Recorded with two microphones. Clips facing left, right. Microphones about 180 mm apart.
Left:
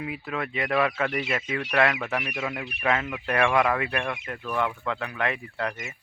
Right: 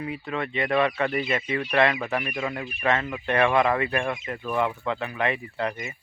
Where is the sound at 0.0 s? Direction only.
5° left (ahead or behind).